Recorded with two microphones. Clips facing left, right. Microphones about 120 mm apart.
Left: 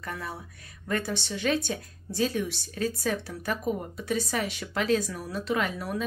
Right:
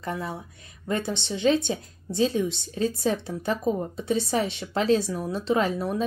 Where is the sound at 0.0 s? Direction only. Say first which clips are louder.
Right 5 dB; 25° right (ahead or behind).